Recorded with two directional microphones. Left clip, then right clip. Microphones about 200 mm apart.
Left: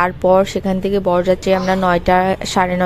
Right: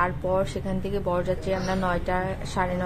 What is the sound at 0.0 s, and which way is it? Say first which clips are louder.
A woman's voice: left 12 dB; 45° left (ahead or behind).